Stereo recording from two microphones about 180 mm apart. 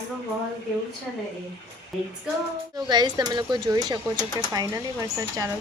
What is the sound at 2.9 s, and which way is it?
Speech, 25° right (ahead or behind).